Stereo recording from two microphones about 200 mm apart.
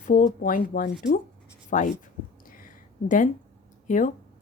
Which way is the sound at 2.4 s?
45° left (ahead or behind).